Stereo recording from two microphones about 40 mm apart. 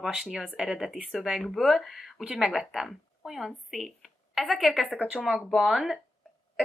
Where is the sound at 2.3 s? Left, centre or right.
Right.